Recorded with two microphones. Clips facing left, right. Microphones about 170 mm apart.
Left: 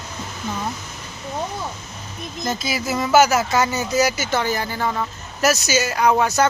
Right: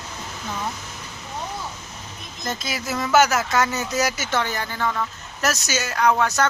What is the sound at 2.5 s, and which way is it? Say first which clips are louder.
Speech: left 4 dB; 5° left (ahead or behind).